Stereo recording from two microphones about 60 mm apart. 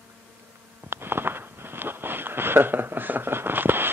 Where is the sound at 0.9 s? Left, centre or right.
Right.